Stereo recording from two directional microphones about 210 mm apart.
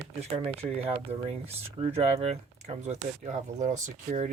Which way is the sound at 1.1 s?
30° right (ahead or behind).